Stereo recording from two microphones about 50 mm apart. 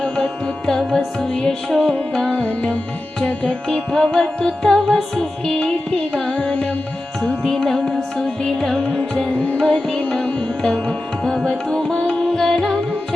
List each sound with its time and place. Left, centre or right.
0.0 s music: centre
2.3 s music: left
3.7 s music: centre
7.4 s carnatic music: centre
8.8 s music: left
9.6 s music: centre